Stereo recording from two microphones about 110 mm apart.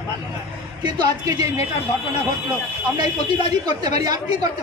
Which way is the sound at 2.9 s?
40° right (ahead or behind).